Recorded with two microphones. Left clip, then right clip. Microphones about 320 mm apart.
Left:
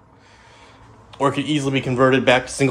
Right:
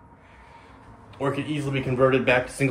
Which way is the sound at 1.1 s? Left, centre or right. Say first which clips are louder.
Left 7 dB; left.